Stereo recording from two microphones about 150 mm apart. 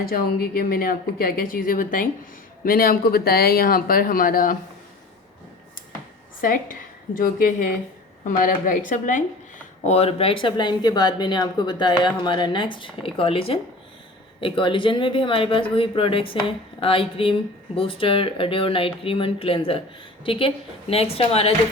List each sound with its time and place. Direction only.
0.0 s a woman's voice: 75° left (ahead or behind)
6.4 s a woman's voice: 65° left (ahead or behind)
9.8 s speech: 45° left (ahead or behind)